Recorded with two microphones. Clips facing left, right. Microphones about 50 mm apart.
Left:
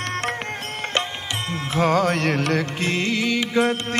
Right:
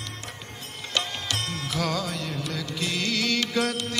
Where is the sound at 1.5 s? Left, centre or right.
Left.